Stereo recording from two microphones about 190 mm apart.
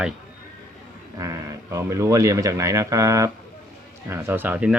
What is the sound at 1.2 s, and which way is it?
Speech, 15° right (ahead or behind).